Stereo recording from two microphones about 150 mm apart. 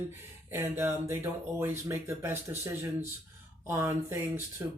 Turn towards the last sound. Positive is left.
turn(degrees=-15)  # may be behind; listen again after turning